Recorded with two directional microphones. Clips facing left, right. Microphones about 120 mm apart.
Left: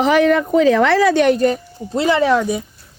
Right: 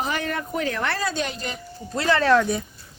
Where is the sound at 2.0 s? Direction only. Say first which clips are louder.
Left 4 dB; 15° left (ahead or behind).